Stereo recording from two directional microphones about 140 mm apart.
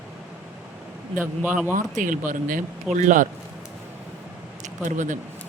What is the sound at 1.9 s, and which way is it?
Speech, 70° right (ahead or behind).